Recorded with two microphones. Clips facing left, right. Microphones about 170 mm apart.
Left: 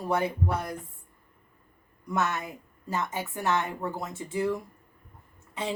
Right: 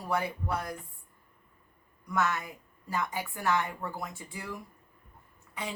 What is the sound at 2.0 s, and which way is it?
A woman's voice, 25° left (ahead or behind).